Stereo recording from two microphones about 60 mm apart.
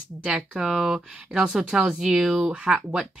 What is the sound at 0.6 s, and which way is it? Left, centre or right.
Speech, centre.